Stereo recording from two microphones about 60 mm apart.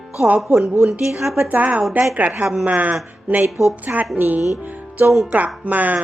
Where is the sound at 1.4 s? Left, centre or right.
Right.